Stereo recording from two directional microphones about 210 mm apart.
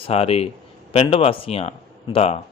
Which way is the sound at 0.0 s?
30° left (ahead or behind).